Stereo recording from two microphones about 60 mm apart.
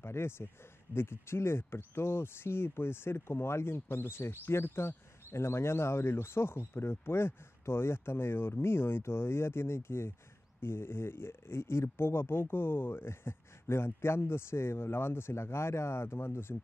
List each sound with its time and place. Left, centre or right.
0.0 s speech: left